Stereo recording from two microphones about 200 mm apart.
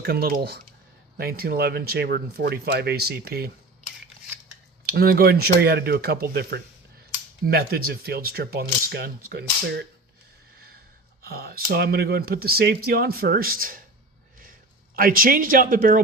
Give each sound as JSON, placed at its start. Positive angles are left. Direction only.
{"t": 0.0, "sound": "speech", "side_deg": -50}
{"t": 4.9, "sound": "speech", "side_deg": -50}
{"t": 11.2, "sound": "speech", "side_deg": -50}
{"t": 14.9, "sound": "speech", "side_deg": -45}